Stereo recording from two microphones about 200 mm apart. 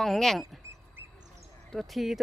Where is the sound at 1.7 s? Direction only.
Centre (ahead or behind).